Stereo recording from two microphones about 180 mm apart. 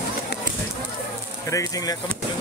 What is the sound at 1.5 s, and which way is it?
Speech, 20° left (ahead or behind).